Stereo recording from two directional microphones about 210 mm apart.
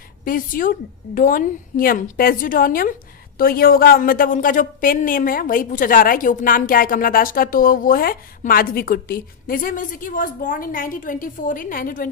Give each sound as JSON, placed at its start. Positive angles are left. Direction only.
{"t": 0.3, "sound": "a woman's voice", "side_deg": 40}